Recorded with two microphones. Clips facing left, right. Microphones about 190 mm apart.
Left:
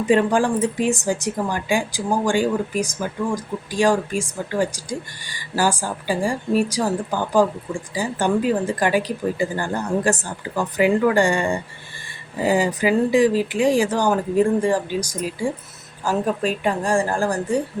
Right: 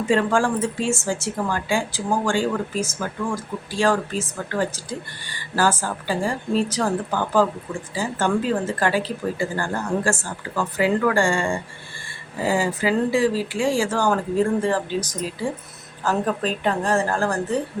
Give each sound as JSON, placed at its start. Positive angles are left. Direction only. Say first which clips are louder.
{"t": 0.0, "sound": "speech", "louder": "left 2 dB", "side_deg": 15}